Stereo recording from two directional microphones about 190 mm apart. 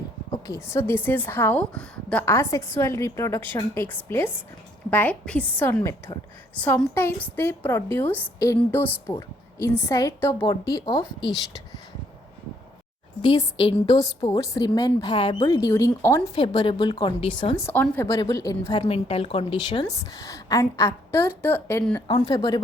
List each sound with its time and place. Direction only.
0.3 s a woman's voice: 15° left (ahead or behind)
10.4 s a woman's voice: 25° left (ahead or behind)
13.2 s a woman's voice: 25° left (ahead or behind)
17.6 s a woman's voice: 10° left (ahead or behind)
22.0 s a woman's voice: 30° left (ahead or behind)